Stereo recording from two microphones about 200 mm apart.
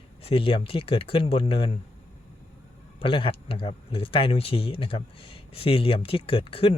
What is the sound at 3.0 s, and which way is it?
Speech, 25° left (ahead or behind).